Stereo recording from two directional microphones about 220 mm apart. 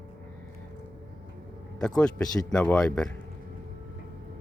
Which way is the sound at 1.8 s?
5° left (ahead or behind).